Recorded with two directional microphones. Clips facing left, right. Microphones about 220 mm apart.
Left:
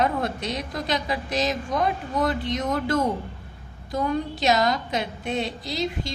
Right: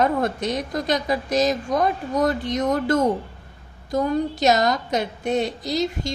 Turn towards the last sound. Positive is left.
turn(degrees=-45)  # may be behind; listen again after turning